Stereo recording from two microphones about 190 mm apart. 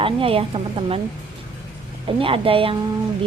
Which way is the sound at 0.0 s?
30° right (ahead or behind).